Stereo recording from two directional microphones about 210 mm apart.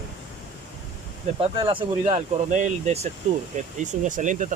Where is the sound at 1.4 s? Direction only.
25° right (ahead or behind).